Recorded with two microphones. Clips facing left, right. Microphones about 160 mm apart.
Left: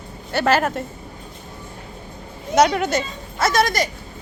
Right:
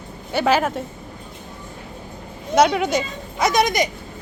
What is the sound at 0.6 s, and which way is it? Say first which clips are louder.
Speech: even; centre (ahead or behind).